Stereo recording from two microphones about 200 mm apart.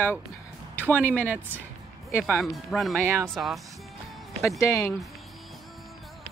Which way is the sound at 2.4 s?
Centre (ahead or behind).